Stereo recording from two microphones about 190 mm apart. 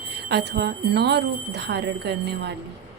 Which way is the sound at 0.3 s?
60° right (ahead or behind).